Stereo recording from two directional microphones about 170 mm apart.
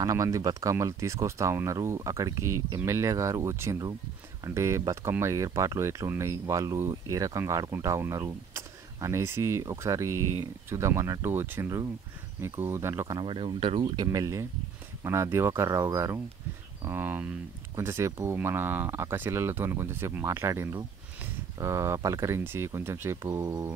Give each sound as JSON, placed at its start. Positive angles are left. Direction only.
{"t": 0.0, "sound": "speech", "side_deg": -20}